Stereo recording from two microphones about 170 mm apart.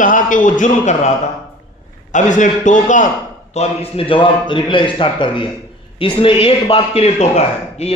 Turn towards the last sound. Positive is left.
turn(degrees=40)  # may be behind; listen again after turning